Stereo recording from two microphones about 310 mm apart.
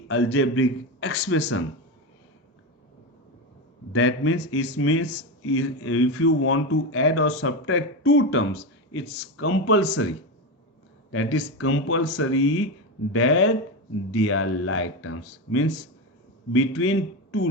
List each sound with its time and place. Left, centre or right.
0.1 s speech: left
3.9 s speech: left
11.1 s speech: left
16.5 s speech: left